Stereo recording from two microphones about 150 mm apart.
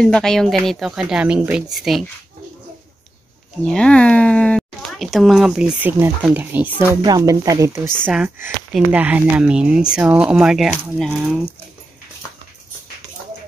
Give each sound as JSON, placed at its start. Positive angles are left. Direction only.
{"t": 0.0, "sound": "speech", "side_deg": 5}
{"t": 3.6, "sound": "speech", "side_deg": 5}
{"t": 7.1, "sound": "speech", "side_deg": -25}
{"t": 8.7, "sound": "speech", "side_deg": -10}